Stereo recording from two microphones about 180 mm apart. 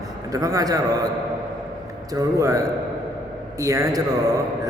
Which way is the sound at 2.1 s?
20° right (ahead or behind).